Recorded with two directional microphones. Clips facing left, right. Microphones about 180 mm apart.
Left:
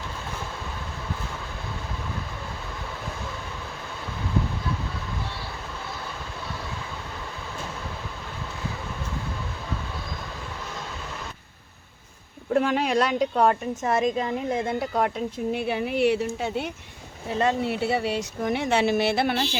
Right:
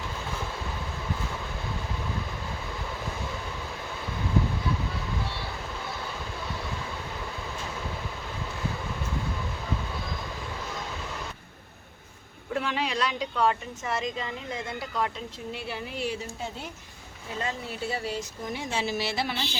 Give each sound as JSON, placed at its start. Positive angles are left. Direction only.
{"t": 12.5, "sound": "a woman's voice", "side_deg": 45}